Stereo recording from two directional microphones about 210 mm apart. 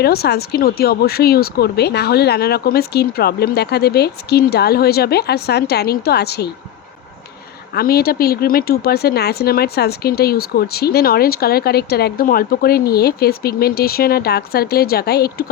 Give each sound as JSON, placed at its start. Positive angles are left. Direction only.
{"t": 0.0, "sound": "speech", "side_deg": 50}
{"t": 7.7, "sound": "speech", "side_deg": 45}